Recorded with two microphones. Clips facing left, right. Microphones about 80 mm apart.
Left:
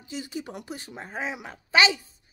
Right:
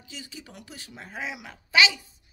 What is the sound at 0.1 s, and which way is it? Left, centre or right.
Speech, left.